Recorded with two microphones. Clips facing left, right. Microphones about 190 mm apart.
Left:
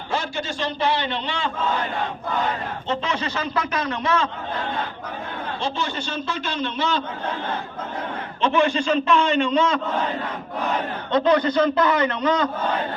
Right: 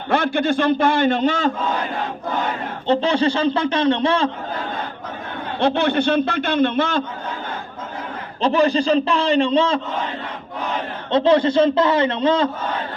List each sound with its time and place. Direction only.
0.1 s a man's voice: 60° right (ahead or behind); by 1.5 s 45° right (ahead or behind)
2.8 s a man's voice: 35° right (ahead or behind)
5.5 s a man's voice: 60° right (ahead or behind)
8.4 s a man's voice: 35° right (ahead or behind)
11.1 s a man's voice: 25° right (ahead or behind)